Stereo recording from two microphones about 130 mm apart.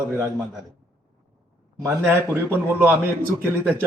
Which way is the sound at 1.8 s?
20° right (ahead or behind).